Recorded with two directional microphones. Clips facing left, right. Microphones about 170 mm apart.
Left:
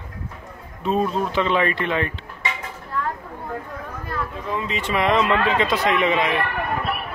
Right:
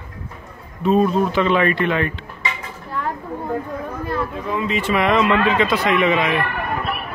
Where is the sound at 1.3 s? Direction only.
25° left (ahead or behind).